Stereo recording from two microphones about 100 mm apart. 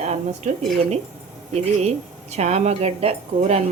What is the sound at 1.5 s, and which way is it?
Speech, 90° right.